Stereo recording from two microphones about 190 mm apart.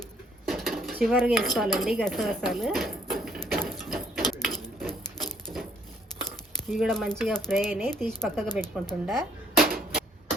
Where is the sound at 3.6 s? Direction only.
Centre (ahead or behind).